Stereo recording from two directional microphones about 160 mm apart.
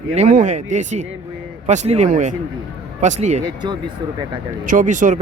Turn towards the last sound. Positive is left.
turn(degrees=-50)  # may be behind; listen again after turning